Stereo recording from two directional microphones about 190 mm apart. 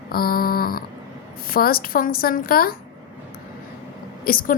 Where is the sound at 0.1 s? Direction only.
50° left (ahead or behind).